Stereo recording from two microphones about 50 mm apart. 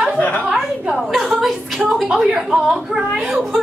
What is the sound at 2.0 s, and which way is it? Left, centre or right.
A woman's voice, right.